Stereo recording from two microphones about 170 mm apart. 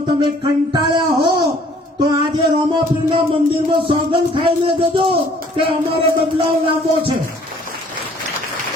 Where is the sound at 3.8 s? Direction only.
30° right (ahead or behind).